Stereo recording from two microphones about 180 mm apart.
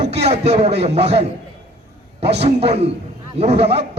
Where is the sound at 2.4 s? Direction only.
35° right (ahead or behind).